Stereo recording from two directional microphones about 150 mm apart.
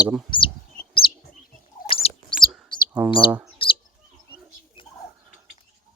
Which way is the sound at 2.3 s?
5° right (ahead or behind).